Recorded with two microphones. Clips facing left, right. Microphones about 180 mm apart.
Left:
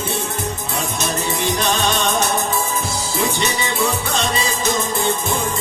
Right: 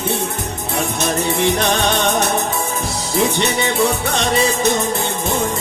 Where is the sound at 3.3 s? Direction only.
65° right (ahead or behind).